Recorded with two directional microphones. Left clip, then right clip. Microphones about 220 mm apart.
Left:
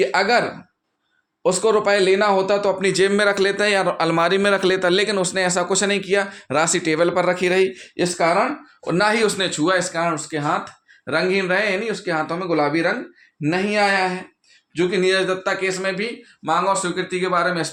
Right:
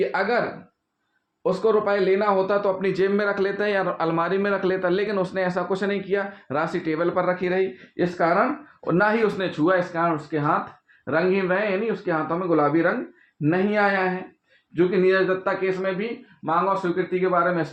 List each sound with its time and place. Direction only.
0.0 s speech: 50° left (ahead or behind)
1.5 s speech: 50° left (ahead or behind)
8.2 s speech: 15° left (ahead or behind)
10.0 s speech: 10° left (ahead or behind)
16.5 s speech: 25° left (ahead or behind)